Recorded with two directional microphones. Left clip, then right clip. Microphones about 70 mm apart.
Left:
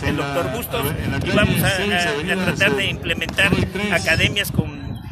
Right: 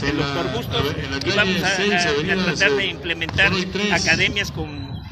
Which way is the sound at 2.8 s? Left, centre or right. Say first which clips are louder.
Left 1 dB; left.